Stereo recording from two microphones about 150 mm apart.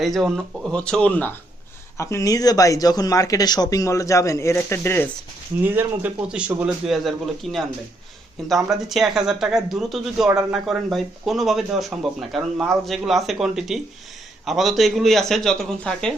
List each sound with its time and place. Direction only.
0.0 s speech: centre (ahead or behind); by 5.0 s 15° left (ahead or behind)
5.6 s speech: 10° right (ahead or behind); by 16.1 s 5° left (ahead or behind)